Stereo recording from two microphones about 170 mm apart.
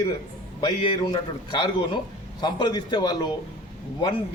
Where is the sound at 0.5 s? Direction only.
25° left (ahead or behind).